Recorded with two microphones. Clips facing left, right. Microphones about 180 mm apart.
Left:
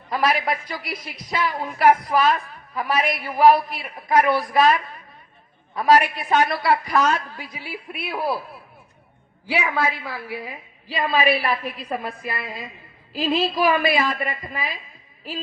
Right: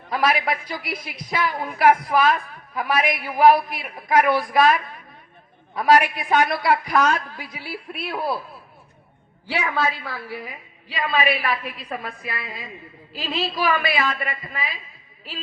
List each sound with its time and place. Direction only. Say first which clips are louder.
0.1 s a woman's voice: even; 10° right (ahead or behind)
9.5 s a woman's voice: left 1 dB; 15° left (ahead or behind)
11.1 s a woman's voice: left 2 dB; 35° left (ahead or behind)
11.9 s a woman's voice: left 3 dB; 5° left (ahead or behind)
13.7 s speech: left 3 dB; 45° left (ahead or behind)